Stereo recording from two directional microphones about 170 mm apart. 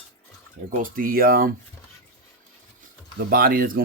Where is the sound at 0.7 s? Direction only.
55° right (ahead or behind).